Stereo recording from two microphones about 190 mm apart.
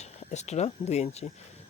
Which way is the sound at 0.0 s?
35° left (ahead or behind).